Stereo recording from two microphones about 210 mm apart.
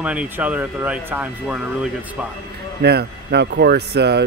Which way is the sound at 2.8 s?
50° right (ahead or behind).